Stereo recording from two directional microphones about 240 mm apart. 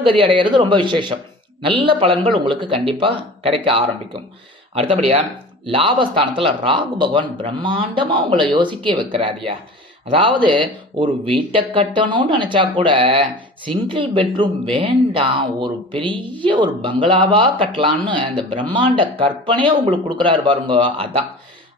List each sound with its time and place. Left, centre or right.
0.0 s speech: right